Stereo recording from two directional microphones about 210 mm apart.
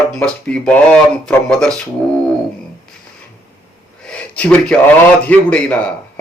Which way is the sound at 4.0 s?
5° left (ahead or behind).